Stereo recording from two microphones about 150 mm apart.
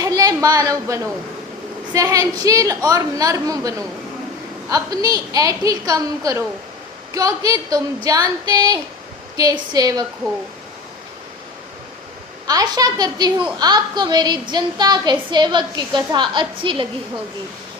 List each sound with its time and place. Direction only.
0.0 s a sound: 25° right (ahead or behind)
1.9 s a woman's voice: 25° right (ahead or behind)
12.5 s a woman's voice: 25° right (ahead or behind)